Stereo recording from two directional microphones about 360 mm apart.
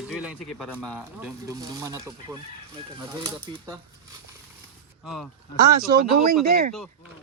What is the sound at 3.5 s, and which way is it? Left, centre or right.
Speech, centre.